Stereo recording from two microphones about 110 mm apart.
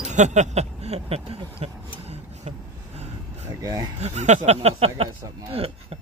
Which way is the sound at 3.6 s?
35° right (ahead or behind).